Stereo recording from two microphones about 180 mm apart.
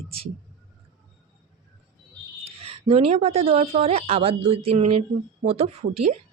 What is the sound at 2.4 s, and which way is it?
A woman's voice, 30° right (ahead or behind).